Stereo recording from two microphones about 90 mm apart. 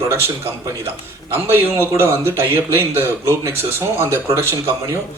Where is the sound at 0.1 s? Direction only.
30° right (ahead or behind).